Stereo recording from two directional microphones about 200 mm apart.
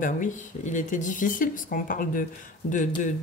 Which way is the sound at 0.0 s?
40° left (ahead or behind).